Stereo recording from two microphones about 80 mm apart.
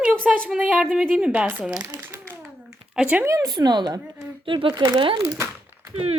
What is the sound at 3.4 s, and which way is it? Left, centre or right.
Speech, right.